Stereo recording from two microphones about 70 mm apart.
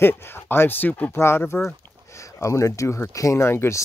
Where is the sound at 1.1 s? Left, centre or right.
Left.